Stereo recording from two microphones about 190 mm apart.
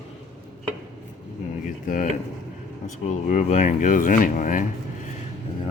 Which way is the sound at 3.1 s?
40° left (ahead or behind).